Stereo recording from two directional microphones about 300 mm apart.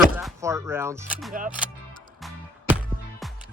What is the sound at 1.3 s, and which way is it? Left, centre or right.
Speech, right.